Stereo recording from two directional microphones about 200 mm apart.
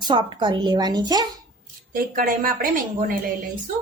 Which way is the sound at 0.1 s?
25° right (ahead or behind).